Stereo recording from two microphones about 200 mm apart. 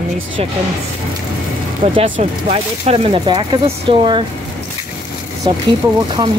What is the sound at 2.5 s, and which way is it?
Speech, 30° right (ahead or behind).